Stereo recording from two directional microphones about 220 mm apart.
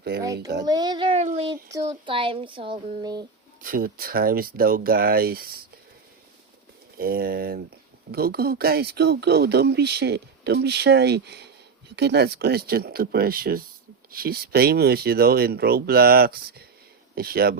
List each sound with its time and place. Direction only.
0.6 s speech: 20° right (ahead or behind)
3.6 s speech: 40° right (ahead or behind)
7.0 s speech: 40° right (ahead or behind)